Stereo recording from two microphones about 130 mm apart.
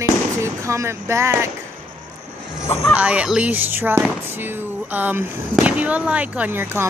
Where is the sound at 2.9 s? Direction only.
10° right (ahead or behind).